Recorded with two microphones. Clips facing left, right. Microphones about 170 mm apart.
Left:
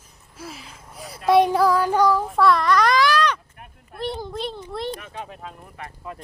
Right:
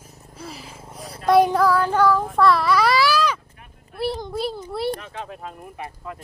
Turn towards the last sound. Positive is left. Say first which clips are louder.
# right 2 dB
turn(degrees=0)  # may be behind; listen again after turning